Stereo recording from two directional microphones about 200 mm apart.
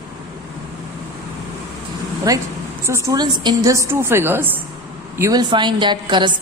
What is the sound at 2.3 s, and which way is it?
A woman's voice, 15° right (ahead or behind).